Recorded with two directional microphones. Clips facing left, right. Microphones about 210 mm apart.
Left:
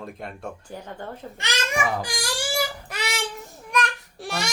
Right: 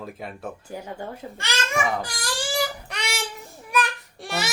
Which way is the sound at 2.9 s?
Centre (ahead or behind).